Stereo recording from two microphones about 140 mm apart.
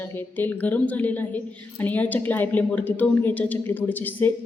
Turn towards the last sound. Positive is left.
turn(degrees=15)  # may be behind; listen again after turning